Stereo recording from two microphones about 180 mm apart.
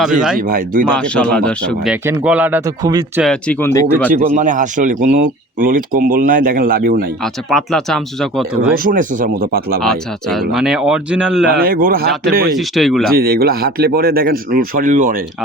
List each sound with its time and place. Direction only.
0.0 s speech: 5° right (ahead or behind)
0.3 s speech: 50° right (ahead or behind)
0.9 s speech: 5° left (ahead or behind)
1.9 s speech: 5° right (ahead or behind)
3.2 s speech: 5° left (ahead or behind)
4.1 s speech: 45° right (ahead or behind)
7.5 s speech: centre (ahead or behind)
8.7 s speech: 50° right (ahead or behind)
9.8 s speech: centre (ahead or behind)
11.4 s speech: 55° right (ahead or behind)
12.5 s speech: centre (ahead or behind)
13.1 s speech: 55° right (ahead or behind)